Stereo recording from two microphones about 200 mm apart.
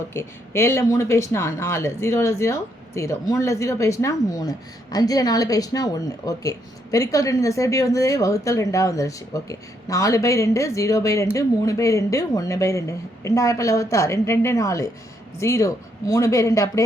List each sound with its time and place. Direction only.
0.1 s speech: 15° left (ahead or behind)